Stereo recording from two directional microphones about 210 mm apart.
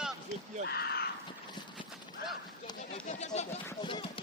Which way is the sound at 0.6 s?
50° left (ahead or behind).